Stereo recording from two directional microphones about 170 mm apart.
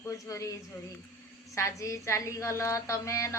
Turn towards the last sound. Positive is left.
turn(degrees=15)  # may be behind; listen again after turning